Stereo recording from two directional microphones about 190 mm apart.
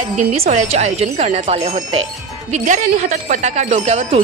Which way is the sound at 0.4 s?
35° right (ahead or behind).